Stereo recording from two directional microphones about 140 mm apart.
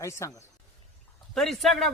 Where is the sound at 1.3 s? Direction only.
Centre (ahead or behind).